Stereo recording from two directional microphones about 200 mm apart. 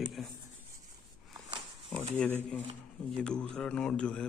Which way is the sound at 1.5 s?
30° right (ahead or behind).